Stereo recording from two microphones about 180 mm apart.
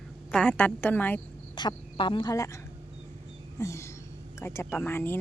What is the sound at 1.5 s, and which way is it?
Speech, 25° left (ahead or behind).